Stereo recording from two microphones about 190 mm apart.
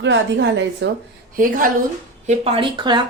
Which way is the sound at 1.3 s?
45° right (ahead or behind).